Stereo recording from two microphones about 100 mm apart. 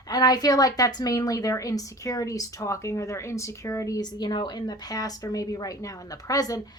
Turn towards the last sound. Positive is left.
turn(degrees=35)  # may be behind; listen again after turning